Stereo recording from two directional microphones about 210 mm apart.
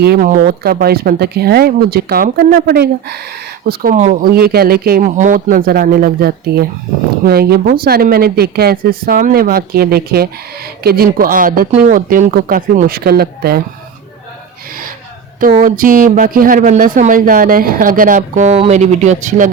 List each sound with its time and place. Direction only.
0.0 s speech: 45° right (ahead or behind)
3.7 s speech: 40° right (ahead or behind)
15.4 s a woman's voice: 40° right (ahead or behind)